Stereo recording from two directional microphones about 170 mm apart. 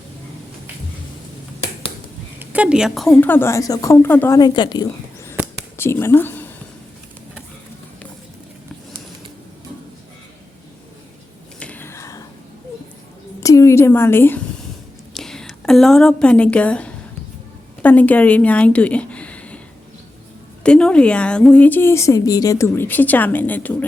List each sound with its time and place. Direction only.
2.4 s a woman's voice: 10° right (ahead or behind); by 4.4 s 10° left (ahead or behind)
4.4 s a woman's voice: 25° left (ahead or behind)
5.7 s speech: 15° left (ahead or behind)
11.6 s whispering: 10° left (ahead or behind)
13.4 s a woman's voice: 20° left (ahead or behind)
20.7 s a woman's voice: 5° left (ahead or behind)